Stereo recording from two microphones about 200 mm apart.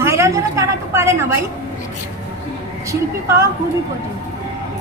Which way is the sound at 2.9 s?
15° right (ahead or behind).